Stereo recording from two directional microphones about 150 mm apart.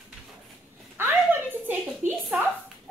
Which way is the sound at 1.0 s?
15° right (ahead or behind).